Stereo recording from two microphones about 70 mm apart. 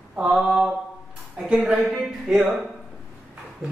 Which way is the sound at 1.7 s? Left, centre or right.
Centre.